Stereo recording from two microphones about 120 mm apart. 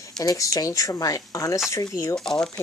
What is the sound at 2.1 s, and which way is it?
Speech, 5° left (ahead or behind).